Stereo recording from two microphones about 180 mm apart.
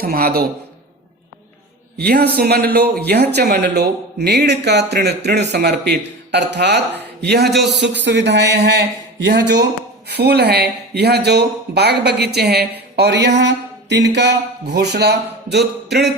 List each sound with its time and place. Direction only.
0.0 s speech: 60° right (ahead or behind)
2.0 s speech: 60° right (ahead or behind)
7.7 s speech: 75° right (ahead or behind)